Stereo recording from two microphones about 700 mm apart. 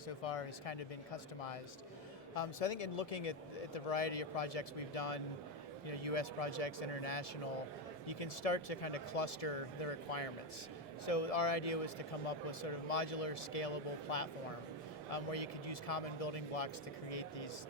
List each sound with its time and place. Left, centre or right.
0.2 s speech: left